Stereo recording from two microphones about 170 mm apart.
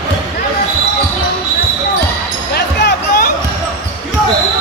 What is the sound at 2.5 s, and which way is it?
Music, 65° left (ahead or behind).